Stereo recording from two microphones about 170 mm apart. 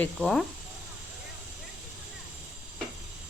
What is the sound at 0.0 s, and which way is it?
Speech, 5° left (ahead or behind).